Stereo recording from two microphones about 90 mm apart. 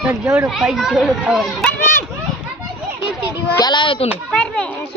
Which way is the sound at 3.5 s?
55° left (ahead or behind).